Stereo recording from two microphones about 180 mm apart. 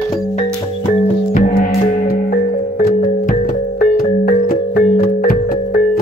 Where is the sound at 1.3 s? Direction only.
55° left (ahead or behind).